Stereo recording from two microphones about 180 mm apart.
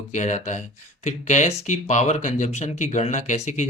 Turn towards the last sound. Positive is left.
turn(degrees=40)  # may be behind; listen again after turning